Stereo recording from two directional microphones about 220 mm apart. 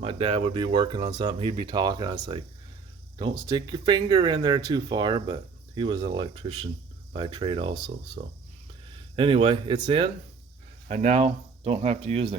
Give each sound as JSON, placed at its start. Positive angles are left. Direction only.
{"t": 0.0, "sound": "speech", "side_deg": -25}
{"t": 8.2, "sound": "speech", "side_deg": -35}
{"t": 9.1, "sound": "speech", "side_deg": -25}
{"t": 10.8, "sound": "speech", "side_deg": -35}